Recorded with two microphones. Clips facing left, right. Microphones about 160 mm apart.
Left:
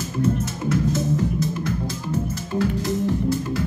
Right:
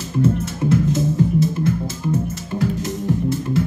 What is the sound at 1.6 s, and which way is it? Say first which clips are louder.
Music: right 5 dB; 25° right (ahead or behind).